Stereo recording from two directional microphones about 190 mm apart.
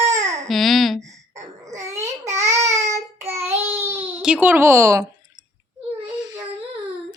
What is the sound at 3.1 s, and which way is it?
Child singing, 15° right (ahead or behind).